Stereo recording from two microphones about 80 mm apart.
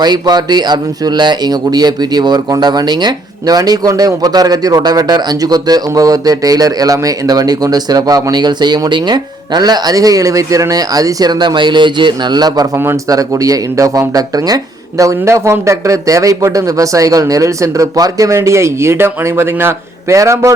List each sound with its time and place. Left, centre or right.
0.0 s speech: right
12.7 s a man's voice: right
13.1 s speech: right
18.3 s a man's voice: right